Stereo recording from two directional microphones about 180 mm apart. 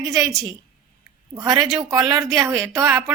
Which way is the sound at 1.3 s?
25° right (ahead or behind).